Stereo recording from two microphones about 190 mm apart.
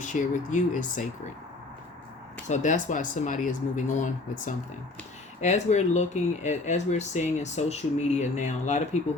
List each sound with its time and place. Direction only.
0.0 s speech: 40° left (ahead or behind)
2.5 s speech: 40° left (ahead or behind)